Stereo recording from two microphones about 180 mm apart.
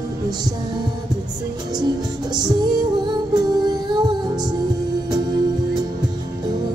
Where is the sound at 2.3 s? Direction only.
25° right (ahead or behind).